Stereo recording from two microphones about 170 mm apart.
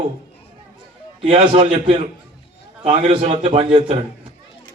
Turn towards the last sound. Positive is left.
turn(degrees=-35)  # may be behind; listen again after turning